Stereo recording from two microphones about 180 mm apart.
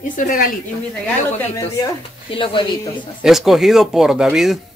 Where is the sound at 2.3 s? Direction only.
30° left (ahead or behind).